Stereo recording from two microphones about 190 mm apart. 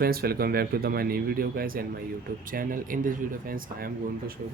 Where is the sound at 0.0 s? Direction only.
55° right (ahead or behind).